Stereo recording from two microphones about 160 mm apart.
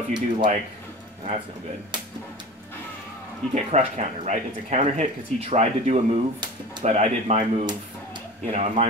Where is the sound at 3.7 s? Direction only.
45° right (ahead or behind).